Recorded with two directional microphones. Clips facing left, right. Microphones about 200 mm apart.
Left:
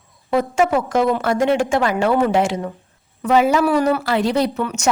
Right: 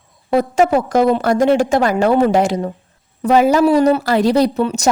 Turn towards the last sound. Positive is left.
turn(degrees=-35)  # may be behind; listen again after turning